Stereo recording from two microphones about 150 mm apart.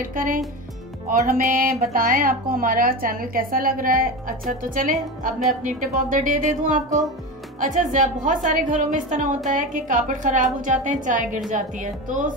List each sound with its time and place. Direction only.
0.1 s a woman's voice: 70° right (ahead or behind)